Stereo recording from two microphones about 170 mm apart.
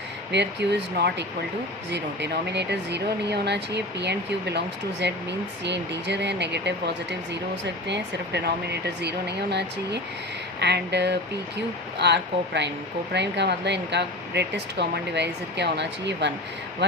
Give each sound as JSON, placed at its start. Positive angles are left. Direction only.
{"t": 0.3, "sound": "speech", "side_deg": -90}